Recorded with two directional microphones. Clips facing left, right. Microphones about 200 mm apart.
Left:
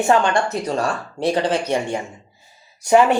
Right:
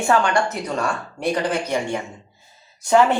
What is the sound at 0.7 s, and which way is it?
Speech, 35° left (ahead or behind).